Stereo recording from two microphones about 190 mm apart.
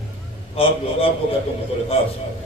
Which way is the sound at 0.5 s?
30° left (ahead or behind).